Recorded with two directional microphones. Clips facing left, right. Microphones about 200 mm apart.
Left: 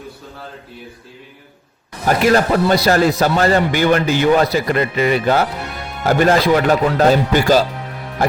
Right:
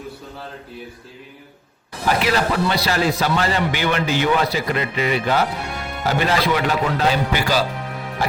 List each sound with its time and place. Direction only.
2.0 s a man's voice: 45° left (ahead or behind)